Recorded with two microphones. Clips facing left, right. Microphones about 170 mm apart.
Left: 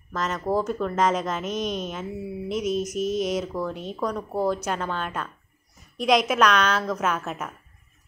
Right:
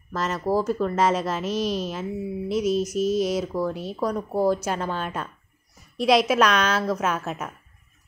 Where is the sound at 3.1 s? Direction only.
5° right (ahead or behind).